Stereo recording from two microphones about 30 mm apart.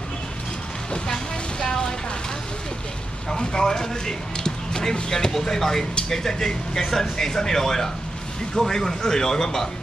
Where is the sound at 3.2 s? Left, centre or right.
Left.